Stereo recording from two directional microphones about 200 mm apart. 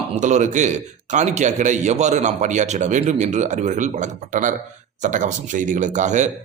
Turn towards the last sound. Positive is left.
turn(degrees=-35)  # may be behind; listen again after turning